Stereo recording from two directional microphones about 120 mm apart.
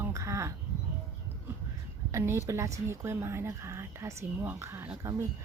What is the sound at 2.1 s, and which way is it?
A woman's voice, 25° right (ahead or behind).